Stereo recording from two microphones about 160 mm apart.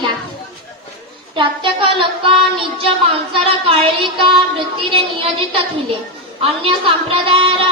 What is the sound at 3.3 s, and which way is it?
A child's voice, 35° right (ahead or behind).